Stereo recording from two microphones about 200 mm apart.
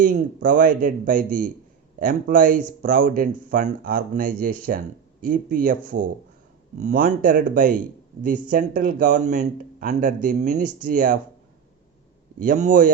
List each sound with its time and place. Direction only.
0.0 s a man's voice: 40° right (ahead or behind)
12.4 s speech: 40° right (ahead or behind)